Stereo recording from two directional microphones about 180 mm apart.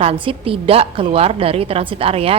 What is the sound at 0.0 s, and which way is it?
A woman's voice, 30° right (ahead or behind).